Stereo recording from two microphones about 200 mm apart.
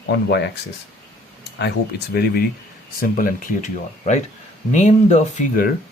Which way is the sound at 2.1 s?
50° left (ahead or behind).